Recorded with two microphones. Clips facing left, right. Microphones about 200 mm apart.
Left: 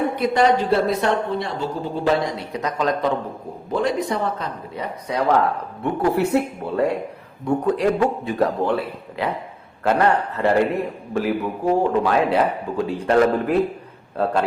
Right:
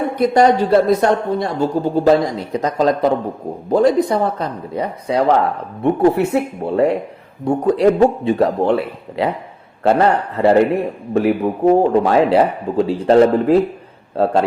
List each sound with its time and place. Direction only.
0.2 s speech: 45° right (ahead or behind); by 13.6 s 30° right (ahead or behind)